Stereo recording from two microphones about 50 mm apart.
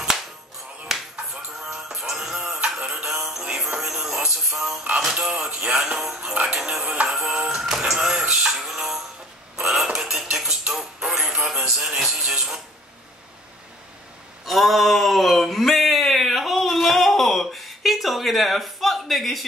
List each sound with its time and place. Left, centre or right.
1.5 s music: centre
4.6 s a sound: centre
4.9 s speech: centre
5.9 s music: centre
6.8 s music: right
7.1 s music: centre
9.6 s dishes: centre
10.0 s music: centre
14.4 s a sound: centre